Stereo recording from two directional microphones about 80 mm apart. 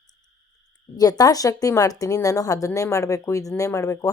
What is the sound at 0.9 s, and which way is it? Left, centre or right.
Speech, left.